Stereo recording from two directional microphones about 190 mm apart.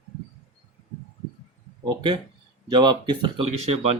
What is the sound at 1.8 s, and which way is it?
Speech, 25° right (ahead or behind).